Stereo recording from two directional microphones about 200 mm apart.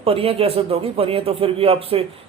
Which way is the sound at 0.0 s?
30° right (ahead or behind).